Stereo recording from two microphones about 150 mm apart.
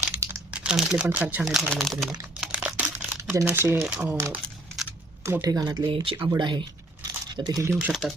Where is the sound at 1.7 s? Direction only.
Centre (ahead or behind).